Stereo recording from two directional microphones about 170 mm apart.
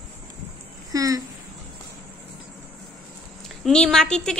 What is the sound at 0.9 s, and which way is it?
Speech, 20° right (ahead or behind).